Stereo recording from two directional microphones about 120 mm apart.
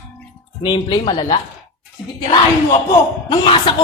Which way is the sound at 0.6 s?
45° left (ahead or behind).